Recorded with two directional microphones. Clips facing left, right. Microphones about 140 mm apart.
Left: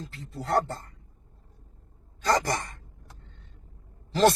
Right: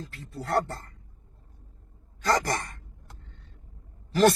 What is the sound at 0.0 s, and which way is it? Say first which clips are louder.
Speech: even; 20° left (ahead or behind).